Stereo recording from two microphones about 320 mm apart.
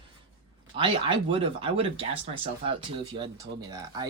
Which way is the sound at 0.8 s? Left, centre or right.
Centre.